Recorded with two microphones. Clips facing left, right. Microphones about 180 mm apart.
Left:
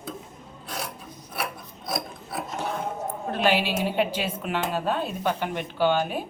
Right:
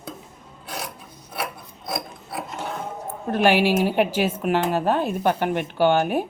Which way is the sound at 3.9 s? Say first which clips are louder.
Right 5 dB; 45° right (ahead or behind).